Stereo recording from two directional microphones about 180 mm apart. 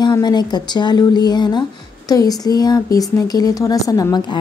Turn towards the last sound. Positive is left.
turn(degrees=25)  # may be behind; listen again after turning